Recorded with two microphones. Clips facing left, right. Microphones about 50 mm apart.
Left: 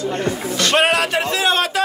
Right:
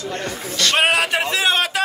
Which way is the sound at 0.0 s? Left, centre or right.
Left.